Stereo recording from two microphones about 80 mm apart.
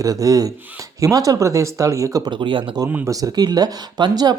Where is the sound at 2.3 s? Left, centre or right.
Right.